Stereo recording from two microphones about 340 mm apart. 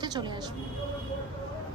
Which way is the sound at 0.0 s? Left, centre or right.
Centre.